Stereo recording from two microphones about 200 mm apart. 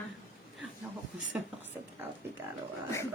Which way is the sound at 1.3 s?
5° right (ahead or behind).